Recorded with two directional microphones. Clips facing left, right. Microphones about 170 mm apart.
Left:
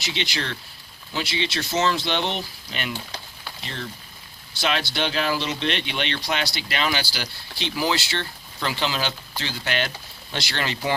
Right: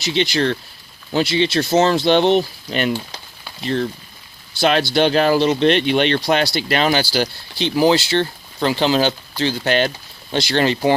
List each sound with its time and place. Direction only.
0.0 s speech: 35° right (ahead or behind)
4.6 s speech: 40° right (ahead or behind)